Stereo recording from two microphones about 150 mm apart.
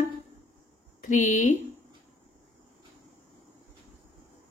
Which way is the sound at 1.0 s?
55° left (ahead or behind).